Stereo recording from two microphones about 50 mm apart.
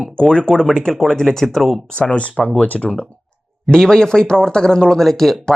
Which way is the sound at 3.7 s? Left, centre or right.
Centre.